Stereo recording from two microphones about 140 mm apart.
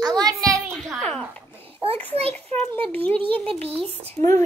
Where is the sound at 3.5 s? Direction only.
40° right (ahead or behind).